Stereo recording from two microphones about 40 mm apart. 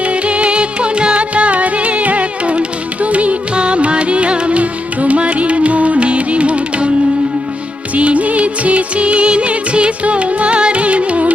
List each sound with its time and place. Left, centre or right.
0.0 s music: right
7.9 s music: right